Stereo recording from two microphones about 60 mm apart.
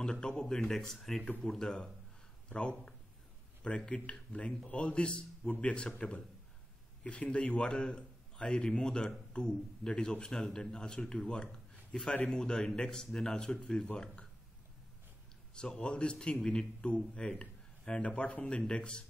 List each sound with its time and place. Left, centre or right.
0.0 s a man's voice: centre
15.5 s a man's voice: centre